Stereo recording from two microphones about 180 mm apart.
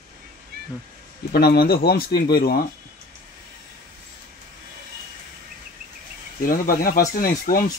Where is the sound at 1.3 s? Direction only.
60° left (ahead or behind).